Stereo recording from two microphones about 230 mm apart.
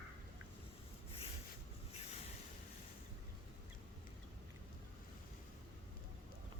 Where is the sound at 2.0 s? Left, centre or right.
Left.